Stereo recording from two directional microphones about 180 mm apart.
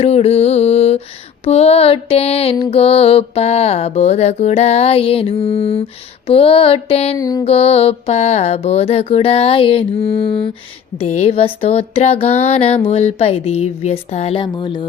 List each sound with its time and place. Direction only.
0.0 s mantra: 35° left (ahead or behind)
7.2 s mantra: 20° left (ahead or behind)
7.4 s mantra: 35° left (ahead or behind)